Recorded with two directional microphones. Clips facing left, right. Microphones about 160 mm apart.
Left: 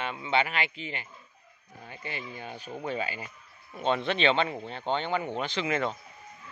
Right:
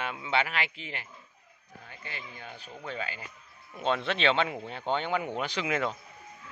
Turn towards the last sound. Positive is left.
turn(degrees=-5)  # may be behind; listen again after turning